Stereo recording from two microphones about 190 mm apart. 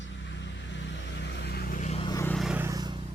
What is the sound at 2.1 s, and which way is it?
Vehicle, 15° left (ahead or behind).